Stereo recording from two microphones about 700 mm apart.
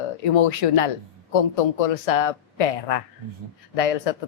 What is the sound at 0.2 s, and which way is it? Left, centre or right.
Speech, left.